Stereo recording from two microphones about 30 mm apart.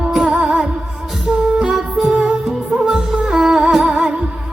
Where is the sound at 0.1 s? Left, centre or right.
Centre.